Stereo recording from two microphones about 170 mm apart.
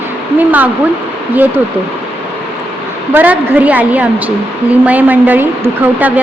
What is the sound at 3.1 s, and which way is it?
A woman's voice, 10° right (ahead or behind).